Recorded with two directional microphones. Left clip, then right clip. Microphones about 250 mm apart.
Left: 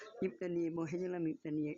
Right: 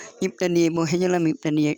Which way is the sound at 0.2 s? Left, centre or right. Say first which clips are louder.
Right 17 dB; right.